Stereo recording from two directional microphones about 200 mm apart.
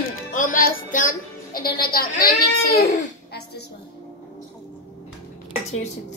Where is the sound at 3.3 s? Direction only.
55° left (ahead or behind).